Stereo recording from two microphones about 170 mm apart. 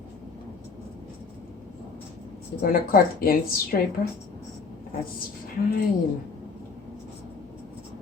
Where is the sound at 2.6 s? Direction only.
60° left (ahead or behind).